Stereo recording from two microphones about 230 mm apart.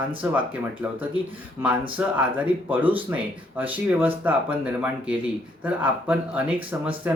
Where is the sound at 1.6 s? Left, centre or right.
Centre.